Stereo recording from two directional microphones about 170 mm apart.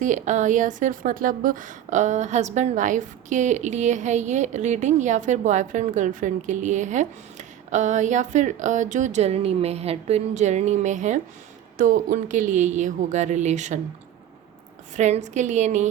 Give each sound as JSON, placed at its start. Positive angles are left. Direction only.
{"t": 0.0, "sound": "a woman's voice", "side_deg": -45}
{"t": 14.9, "sound": "a woman's voice", "side_deg": -45}